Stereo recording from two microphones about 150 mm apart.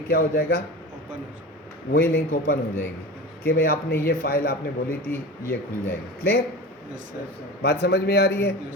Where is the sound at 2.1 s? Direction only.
85° left.